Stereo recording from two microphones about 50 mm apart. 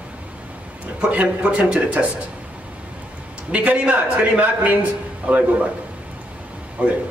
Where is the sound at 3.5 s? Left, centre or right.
Right.